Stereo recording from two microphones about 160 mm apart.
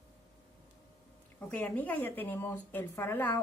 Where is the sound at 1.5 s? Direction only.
10° left (ahead or behind).